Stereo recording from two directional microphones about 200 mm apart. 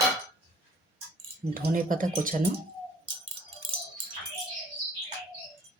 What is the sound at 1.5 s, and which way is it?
Speech, 45° right (ahead or behind).